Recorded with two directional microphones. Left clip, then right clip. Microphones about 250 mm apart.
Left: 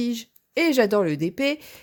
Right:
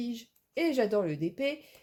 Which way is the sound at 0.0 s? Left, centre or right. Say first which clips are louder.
Left 10 dB; left.